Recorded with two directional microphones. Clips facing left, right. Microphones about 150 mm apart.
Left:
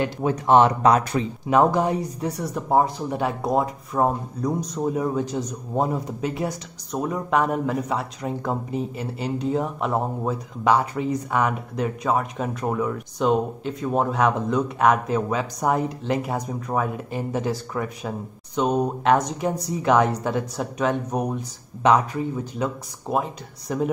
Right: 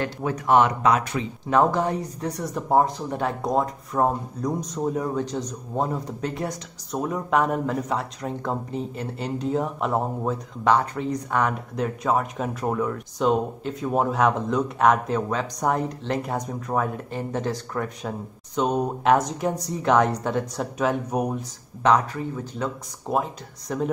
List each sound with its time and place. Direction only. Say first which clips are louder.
0.0 s speech: left 3 dB; 25° left (ahead or behind)
1.5 s speech: left 2 dB; 15° left (ahead or behind); by 21.5 s 5° right (ahead or behind)
21.8 s speech: left 2 dB; 10° left (ahead or behind)
23.0 s speech: even; centre (ahead or behind)